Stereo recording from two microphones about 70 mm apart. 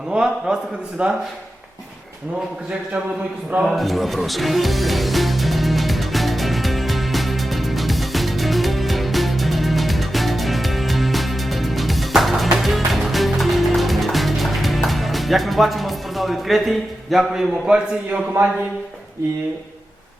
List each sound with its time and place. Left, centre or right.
0.1 s a man's voice: centre
3.6 s music: centre
18.4 s speech: right